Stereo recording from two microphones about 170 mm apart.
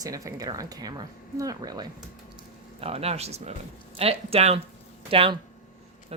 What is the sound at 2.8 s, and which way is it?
Speech, 35° right (ahead or behind).